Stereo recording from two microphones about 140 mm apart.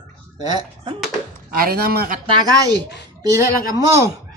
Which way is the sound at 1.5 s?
90° right.